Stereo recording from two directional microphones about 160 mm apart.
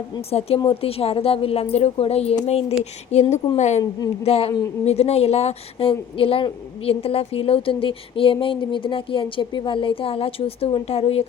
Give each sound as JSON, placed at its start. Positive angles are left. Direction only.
{"t": 0.3, "sound": "a woman's voice", "side_deg": 40}